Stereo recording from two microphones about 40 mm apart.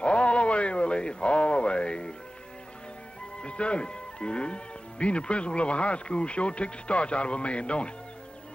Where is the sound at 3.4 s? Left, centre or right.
Left.